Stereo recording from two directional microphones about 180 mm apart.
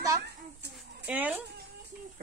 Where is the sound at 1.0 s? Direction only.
10° right (ahead or behind).